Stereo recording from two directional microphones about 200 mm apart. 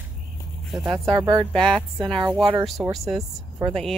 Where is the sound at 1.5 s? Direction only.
Centre (ahead or behind).